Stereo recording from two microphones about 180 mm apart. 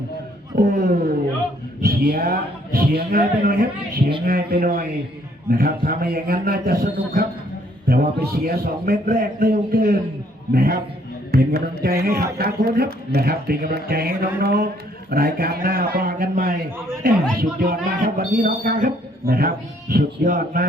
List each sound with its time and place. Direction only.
0.6 s a man's voice: 45° right (ahead or behind)